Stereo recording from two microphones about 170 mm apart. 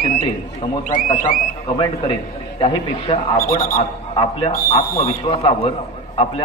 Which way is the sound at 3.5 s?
60° left (ahead or behind).